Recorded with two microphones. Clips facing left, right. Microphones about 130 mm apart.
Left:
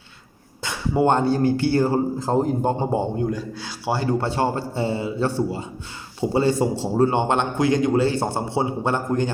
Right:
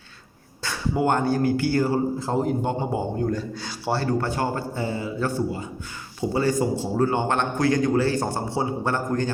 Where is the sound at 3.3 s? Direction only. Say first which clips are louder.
Even; 5° left (ahead or behind).